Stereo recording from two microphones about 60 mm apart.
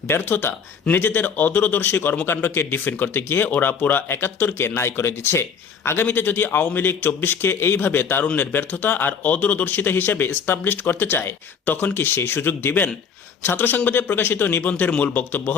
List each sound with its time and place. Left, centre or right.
0.1 s a man's voice: left